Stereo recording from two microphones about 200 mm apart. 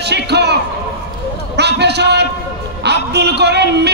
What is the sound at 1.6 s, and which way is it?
A man's voice, 55° right (ahead or behind).